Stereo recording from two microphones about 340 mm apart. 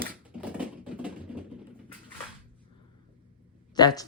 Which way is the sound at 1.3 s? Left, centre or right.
Centre.